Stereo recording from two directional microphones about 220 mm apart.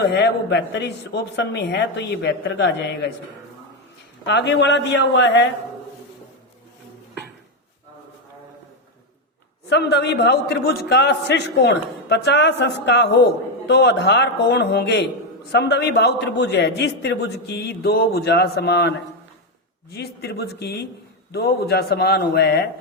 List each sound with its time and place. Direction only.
0.1 s a man's voice: 50° left (ahead or behind)
4.3 s a man's voice: 50° left (ahead or behind)
9.6 s a man's voice: 50° left (ahead or behind)